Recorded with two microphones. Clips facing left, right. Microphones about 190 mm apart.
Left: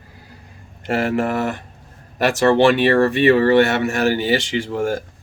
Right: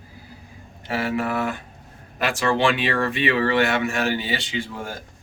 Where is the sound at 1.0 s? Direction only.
45° left (ahead or behind).